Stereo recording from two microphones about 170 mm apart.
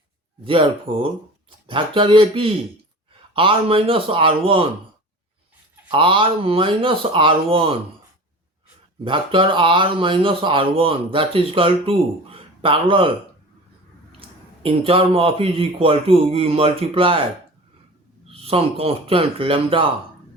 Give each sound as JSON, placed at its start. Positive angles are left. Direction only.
{"t": 0.4, "sound": "speech", "side_deg": -30}
{"t": 5.9, "sound": "speech", "side_deg": -30}
{"t": 9.0, "sound": "speech", "side_deg": -30}
{"t": 14.2, "sound": "speech", "side_deg": -30}
{"t": 18.3, "sound": "speech", "side_deg": -35}